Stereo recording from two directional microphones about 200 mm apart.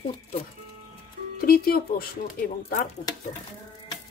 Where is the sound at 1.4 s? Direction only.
45° left (ahead or behind).